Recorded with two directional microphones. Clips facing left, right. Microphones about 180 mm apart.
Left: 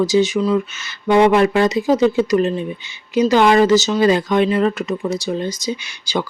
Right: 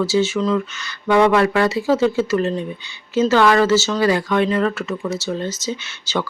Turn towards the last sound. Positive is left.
turn(degrees=15)  # may be behind; listen again after turning